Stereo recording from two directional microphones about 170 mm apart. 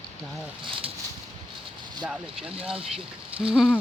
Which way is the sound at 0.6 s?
30° right (ahead or behind).